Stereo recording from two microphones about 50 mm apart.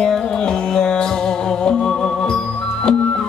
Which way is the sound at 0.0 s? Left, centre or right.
Centre.